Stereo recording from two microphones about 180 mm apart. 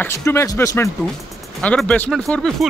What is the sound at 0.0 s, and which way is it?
A man's voice, 15° left (ahead or behind).